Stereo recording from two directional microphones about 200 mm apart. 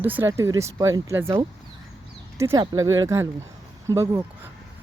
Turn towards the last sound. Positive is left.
turn(degrees=-15)  # may be behind; listen again after turning